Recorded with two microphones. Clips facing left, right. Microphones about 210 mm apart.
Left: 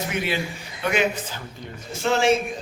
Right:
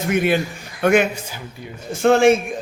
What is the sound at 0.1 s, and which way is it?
Speech, 50° right (ahead or behind).